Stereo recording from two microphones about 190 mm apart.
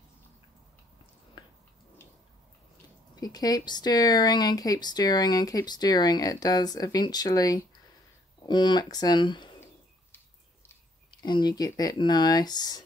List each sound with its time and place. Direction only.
3.2 s speech: 20° left (ahead or behind)
11.1 s speech: 25° left (ahead or behind)